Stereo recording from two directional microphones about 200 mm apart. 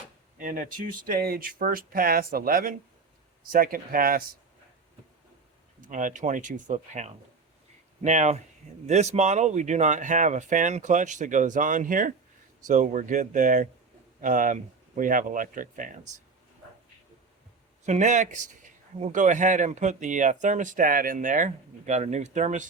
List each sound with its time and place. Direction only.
0.3 s speech: 40° right (ahead or behind)
5.8 s a man's voice: 40° right (ahead or behind)
17.8 s a man's voice: 35° right (ahead or behind)